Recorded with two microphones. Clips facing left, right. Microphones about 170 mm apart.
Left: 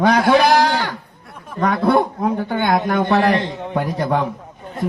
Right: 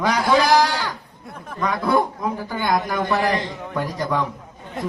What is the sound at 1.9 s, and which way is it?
A man's voice, 60° left (ahead or behind).